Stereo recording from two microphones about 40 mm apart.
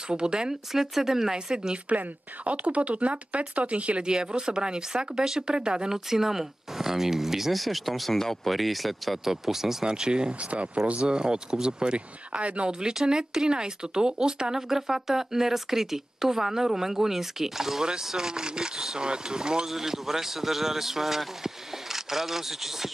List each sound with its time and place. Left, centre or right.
0.1 s speech: right
2.4 s speech: right
4.0 s speech: right
6.0 s speech: centre
9.8 s speech: right
10.5 s speech: right
10.9 s speech: right
14.5 s speech: centre
19.7 s speech: centre